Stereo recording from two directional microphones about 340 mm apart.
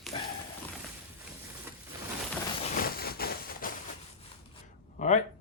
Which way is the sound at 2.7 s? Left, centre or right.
Left.